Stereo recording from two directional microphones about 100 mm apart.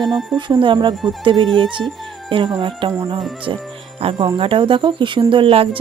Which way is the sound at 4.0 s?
60° right (ahead or behind).